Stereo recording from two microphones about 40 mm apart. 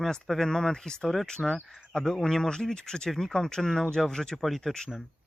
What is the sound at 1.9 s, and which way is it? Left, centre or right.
Speech, centre.